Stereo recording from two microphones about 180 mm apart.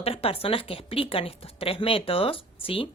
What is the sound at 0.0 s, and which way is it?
A woman's voice, 30° left (ahead or behind).